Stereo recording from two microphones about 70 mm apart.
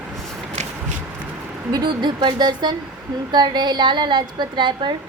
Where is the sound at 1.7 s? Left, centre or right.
Right.